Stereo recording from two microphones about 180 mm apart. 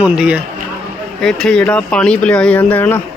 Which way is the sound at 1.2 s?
5° left (ahead or behind).